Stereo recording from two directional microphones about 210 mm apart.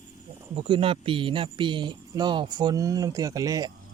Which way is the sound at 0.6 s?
25° right (ahead or behind).